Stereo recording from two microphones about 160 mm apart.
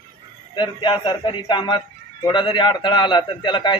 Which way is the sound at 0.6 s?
30° left (ahead or behind).